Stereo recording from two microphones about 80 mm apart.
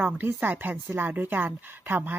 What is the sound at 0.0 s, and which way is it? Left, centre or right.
Speech, centre.